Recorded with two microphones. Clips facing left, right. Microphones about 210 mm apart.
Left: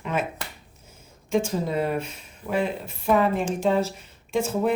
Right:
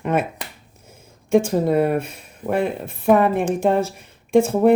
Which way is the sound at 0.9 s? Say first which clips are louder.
Right 8 dB; 55° right (ahead or behind).